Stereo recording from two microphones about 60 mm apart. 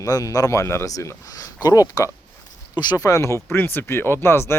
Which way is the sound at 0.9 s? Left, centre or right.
Left.